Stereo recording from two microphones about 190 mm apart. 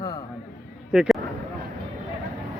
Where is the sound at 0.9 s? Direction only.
Centre (ahead or behind).